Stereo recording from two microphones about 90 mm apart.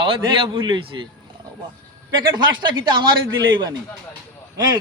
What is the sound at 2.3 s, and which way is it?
Speech, 60° right (ahead or behind).